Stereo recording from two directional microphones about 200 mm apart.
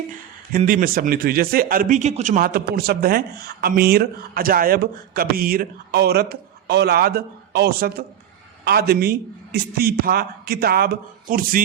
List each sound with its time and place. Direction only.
0.5 s a man's voice: 45° right (ahead or behind)